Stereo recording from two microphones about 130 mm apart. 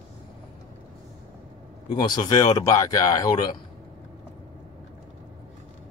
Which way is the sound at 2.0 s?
35° left (ahead or behind).